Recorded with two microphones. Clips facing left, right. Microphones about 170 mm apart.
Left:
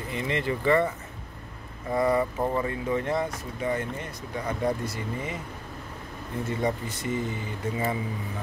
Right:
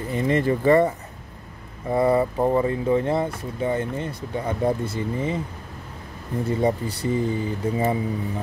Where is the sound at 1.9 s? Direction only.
25° right (ahead or behind).